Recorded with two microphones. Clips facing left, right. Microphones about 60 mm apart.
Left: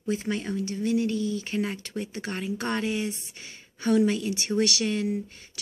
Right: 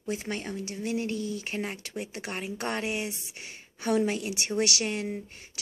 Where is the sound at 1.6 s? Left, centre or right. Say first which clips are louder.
Left 4 dB; centre.